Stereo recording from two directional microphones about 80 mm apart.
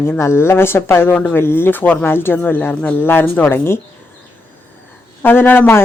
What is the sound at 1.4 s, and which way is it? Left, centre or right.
A woman's voice, left.